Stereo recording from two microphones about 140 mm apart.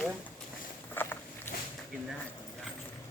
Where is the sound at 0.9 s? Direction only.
15° left (ahead or behind).